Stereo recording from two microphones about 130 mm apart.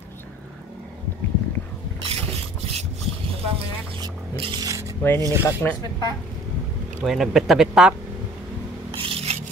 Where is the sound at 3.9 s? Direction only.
45° right (ahead or behind).